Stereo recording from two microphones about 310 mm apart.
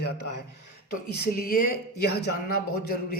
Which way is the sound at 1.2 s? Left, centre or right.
Left.